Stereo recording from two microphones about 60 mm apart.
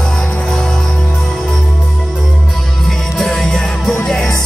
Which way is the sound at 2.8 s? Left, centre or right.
Centre.